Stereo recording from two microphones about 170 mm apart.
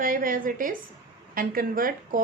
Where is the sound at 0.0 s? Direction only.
55° right (ahead or behind).